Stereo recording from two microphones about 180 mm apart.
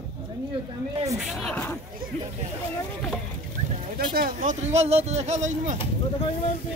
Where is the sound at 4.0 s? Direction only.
50° right (ahead or behind).